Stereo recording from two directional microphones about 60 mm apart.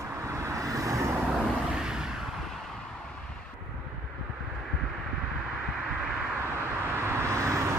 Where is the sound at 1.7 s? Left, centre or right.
Centre.